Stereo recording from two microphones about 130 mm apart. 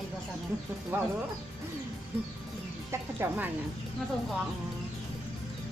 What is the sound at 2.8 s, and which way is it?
Speech, 20° right (ahead or behind).